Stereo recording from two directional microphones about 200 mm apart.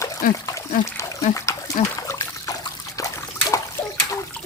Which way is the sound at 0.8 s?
15° left (ahead or behind).